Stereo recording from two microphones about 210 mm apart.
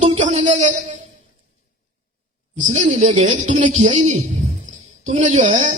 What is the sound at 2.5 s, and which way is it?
A woman's voice, 35° right (ahead or behind).